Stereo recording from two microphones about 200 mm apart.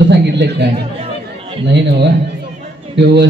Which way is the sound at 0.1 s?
55° right (ahead or behind).